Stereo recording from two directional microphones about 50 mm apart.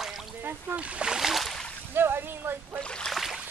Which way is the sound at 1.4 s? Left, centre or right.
Centre.